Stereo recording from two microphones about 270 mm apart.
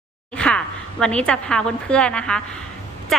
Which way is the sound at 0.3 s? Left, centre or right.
Centre.